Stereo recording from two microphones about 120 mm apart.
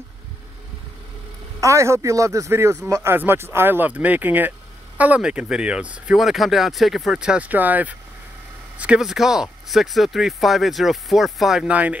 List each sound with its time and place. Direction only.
1.6 s speech: 25° right (ahead or behind)